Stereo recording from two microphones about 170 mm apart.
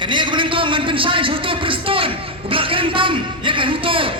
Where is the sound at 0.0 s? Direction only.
30° right (ahead or behind).